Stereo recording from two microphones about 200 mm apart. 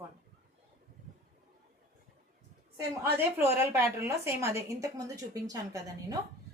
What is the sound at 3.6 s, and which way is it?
A woman's voice, 15° right (ahead or behind).